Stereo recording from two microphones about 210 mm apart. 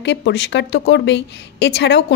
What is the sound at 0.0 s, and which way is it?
A woman's voice, 55° left (ahead or behind).